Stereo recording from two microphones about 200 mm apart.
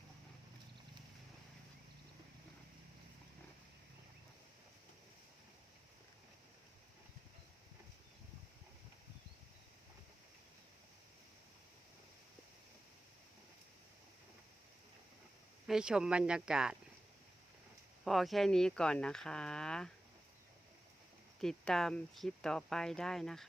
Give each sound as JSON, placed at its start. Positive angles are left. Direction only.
{"t": 15.6, "sound": "speech", "side_deg": -5}
{"t": 18.0, "sound": "speech", "side_deg": 0}
{"t": 21.4, "sound": "speech", "side_deg": 0}